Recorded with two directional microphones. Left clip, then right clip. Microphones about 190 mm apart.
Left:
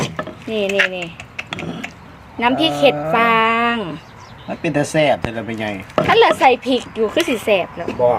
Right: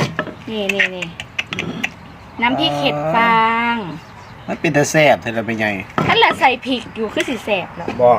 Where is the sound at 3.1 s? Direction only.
60° left (ahead or behind).